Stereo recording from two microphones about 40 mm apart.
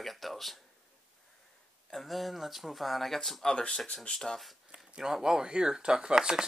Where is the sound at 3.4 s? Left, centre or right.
Left.